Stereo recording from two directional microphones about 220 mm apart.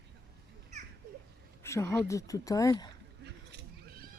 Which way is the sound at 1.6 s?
10° left (ahead or behind).